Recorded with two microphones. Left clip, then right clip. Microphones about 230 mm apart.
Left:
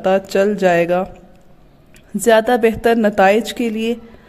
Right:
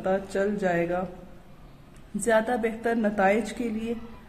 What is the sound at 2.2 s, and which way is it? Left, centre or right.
A woman's voice, left.